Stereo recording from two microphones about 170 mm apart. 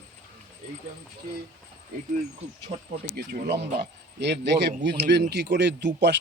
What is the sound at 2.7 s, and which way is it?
Speech, 30° right (ahead or behind).